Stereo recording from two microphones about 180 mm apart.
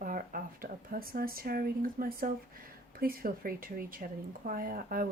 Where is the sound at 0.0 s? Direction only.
50° right (ahead or behind).